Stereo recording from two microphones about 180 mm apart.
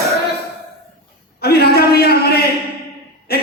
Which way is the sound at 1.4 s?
60° left (ahead or behind).